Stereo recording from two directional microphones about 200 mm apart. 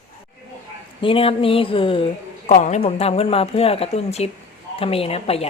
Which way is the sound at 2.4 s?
40° left (ahead or behind).